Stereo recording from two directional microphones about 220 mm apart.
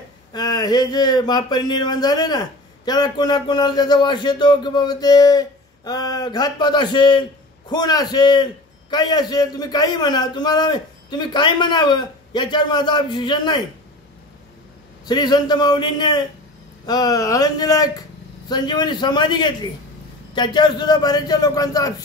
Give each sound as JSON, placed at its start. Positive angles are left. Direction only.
{"t": 0.3, "sound": "speech", "side_deg": 20}
{"t": 15.0, "sound": "a man's voice", "side_deg": 20}